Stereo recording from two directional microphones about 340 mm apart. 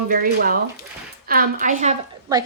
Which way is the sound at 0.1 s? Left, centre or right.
Right.